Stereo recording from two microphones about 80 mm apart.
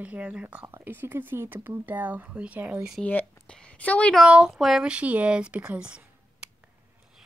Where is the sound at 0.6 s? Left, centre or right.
Right.